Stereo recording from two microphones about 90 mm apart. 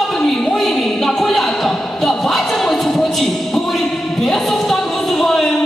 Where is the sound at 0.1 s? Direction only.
5° left (ahead or behind).